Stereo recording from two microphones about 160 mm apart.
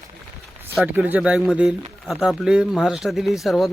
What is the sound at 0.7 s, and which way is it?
Speech, 10° right (ahead or behind).